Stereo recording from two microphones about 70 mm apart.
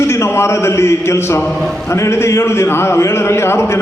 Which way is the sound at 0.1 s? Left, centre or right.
Left.